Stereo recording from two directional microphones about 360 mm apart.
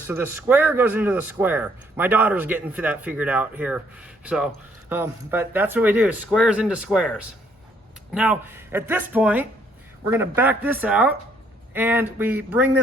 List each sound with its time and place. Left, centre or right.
0.1 s a man's voice: centre
4.9 s a man's voice: centre